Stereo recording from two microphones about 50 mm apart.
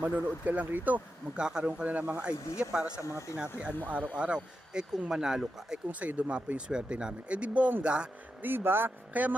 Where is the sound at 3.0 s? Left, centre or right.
Left.